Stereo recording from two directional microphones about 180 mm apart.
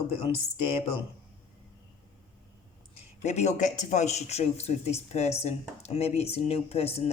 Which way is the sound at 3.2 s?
40° left (ahead or behind).